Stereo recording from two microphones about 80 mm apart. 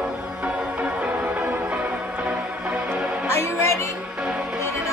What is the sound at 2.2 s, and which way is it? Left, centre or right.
Music, centre.